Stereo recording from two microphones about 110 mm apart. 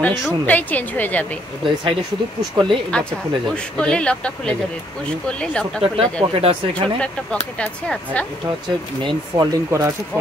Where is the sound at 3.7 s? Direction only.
10° left (ahead or behind).